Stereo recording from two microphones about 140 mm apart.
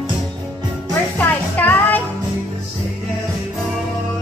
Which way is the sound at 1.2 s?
10° left (ahead or behind).